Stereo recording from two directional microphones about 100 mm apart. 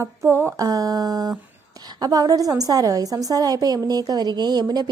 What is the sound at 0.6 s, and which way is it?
A woman's voice, 40° right (ahead or behind).